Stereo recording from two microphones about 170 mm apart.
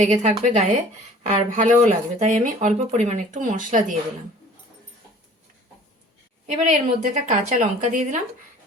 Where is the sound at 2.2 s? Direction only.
45° right (ahead or behind).